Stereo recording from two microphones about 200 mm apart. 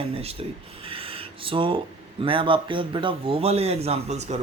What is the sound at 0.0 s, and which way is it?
Speech, 30° right (ahead or behind).